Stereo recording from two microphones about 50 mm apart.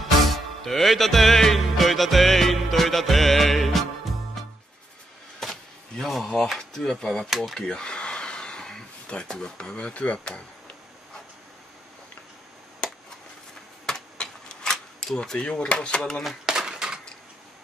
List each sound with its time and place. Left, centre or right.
0.3 s music: centre
5.4 s speech: centre
7.2 s speech: centre
7.5 s speech: centre
13.8 s a sound: centre
15.2 s speech: centre
16.3 s a sound: centre